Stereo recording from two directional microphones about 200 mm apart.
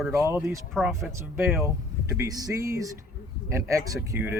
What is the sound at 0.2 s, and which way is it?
Speech, 15° right (ahead or behind).